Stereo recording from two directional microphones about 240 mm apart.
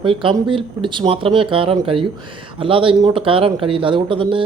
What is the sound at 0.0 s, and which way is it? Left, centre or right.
Speech, right.